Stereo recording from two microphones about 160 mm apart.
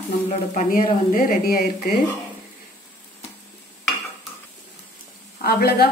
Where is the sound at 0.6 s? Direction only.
60° left (ahead or behind).